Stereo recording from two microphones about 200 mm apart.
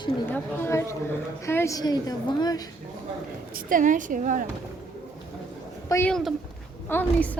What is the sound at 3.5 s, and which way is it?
Speech, 40° right (ahead or behind).